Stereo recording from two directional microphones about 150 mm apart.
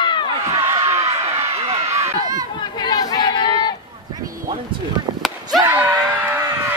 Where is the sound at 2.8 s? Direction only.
25° left (ahead or behind).